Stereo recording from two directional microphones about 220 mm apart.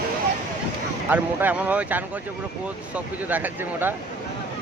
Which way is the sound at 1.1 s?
10° right (ahead or behind).